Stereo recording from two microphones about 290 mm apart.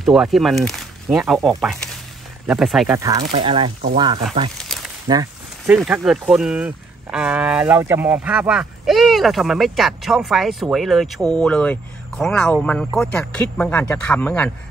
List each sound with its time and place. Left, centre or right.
0.0 s speech: centre
3.0 s speech: centre
4.6 s a sound: centre
5.0 s speech: centre
5.7 s speech: centre